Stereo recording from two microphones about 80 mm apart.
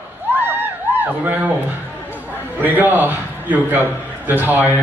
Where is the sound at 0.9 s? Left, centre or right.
Right.